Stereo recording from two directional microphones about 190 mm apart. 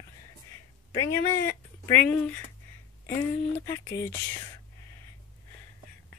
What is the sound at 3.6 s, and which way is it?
Speech, 15° left (ahead or behind).